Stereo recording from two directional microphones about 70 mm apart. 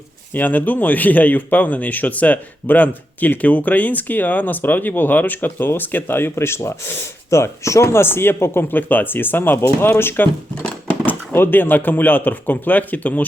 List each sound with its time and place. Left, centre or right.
0.3 s speech: left
10.6 s speech: left